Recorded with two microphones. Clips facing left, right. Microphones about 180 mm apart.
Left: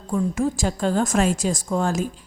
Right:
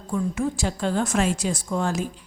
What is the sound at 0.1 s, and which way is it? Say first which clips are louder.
A woman's voice: left 3 dB; 40° left (ahead or behind).